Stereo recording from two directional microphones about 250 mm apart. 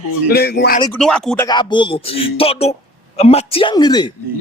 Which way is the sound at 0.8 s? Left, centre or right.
Centre.